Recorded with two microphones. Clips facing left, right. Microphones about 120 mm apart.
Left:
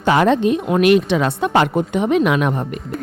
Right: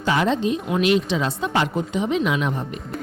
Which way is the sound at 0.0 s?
60° left (ahead or behind).